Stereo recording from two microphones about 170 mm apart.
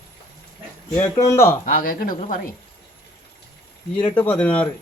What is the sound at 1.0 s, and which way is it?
Speech, 20° left (ahead or behind).